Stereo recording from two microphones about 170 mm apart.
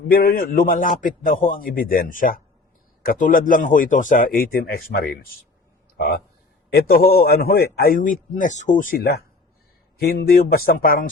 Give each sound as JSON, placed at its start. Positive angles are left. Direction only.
{"t": 0.1, "sound": "a man's voice", "side_deg": 60}